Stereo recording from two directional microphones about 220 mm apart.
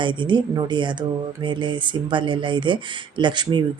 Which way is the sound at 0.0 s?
20° right (ahead or behind).